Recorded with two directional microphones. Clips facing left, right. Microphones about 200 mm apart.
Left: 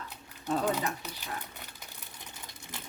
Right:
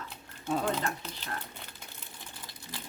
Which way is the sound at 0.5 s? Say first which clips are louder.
Left 1 dB; 5° left (ahead or behind).